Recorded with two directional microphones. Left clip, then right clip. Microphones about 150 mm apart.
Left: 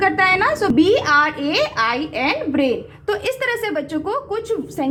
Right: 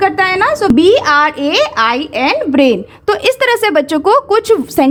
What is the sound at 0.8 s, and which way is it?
A woman's voice, 50° right (ahead or behind).